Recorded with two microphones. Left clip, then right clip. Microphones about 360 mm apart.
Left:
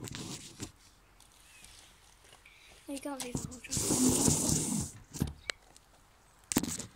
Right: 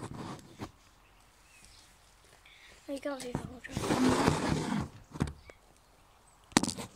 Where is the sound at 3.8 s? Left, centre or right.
Right.